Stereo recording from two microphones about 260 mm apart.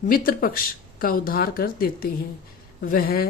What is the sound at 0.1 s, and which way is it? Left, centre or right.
Speech, left.